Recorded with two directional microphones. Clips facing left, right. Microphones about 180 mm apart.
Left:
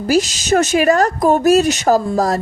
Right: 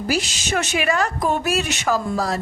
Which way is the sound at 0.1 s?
40° left (ahead or behind).